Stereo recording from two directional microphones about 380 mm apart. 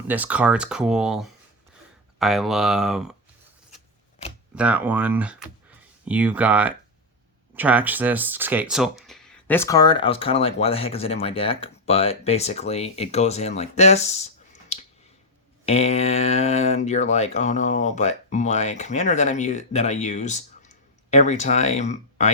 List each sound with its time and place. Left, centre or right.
0.1 s speech: centre
4.5 s speech: centre
14.7 s a sound: centre
15.6 s speech: centre